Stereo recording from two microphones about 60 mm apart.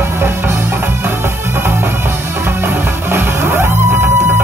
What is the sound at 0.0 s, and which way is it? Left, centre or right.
Music, right.